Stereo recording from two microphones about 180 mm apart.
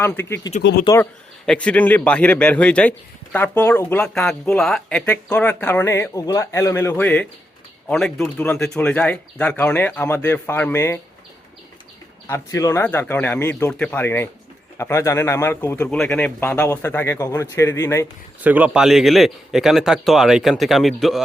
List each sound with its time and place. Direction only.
0.0 s speech: 10° left (ahead or behind)
0.6 s speech: 70° left (ahead or behind)
1.5 s speech: 5° left (ahead or behind)
12.3 s speech: 15° left (ahead or behind)
18.4 s speech: 10° right (ahead or behind)